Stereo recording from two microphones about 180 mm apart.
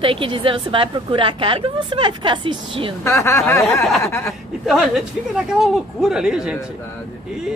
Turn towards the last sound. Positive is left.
turn(degrees=-5)  # may be behind; listen again after turning